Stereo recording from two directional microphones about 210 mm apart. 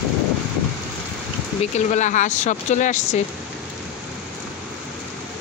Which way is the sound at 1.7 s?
35° left (ahead or behind).